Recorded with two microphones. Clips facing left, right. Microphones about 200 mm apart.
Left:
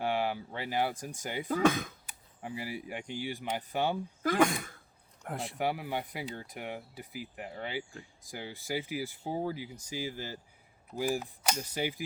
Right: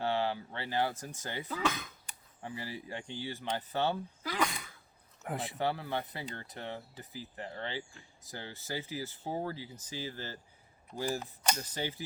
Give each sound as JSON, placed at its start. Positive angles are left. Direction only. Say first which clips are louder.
{"t": 0.0, "sound": "speech", "louder": "left 1 dB", "side_deg": 15}
{"t": 1.5, "sound": "speech", "louder": "left 8 dB", "side_deg": 50}
{"t": 2.4, "sound": "speech", "louder": "left 3 dB", "side_deg": 15}
{"t": 4.2, "sound": "speech", "louder": "left 12 dB", "side_deg": 50}
{"t": 5.2, "sound": "speech", "louder": "even", "side_deg": 0}
{"t": 5.5, "sound": "speech", "louder": "left 2 dB", "side_deg": 10}